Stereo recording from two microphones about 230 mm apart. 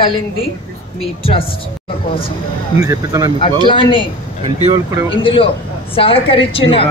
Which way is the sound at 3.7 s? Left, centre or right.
Left.